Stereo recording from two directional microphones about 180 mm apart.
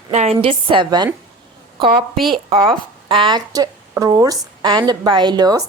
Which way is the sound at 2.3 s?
30° right (ahead or behind).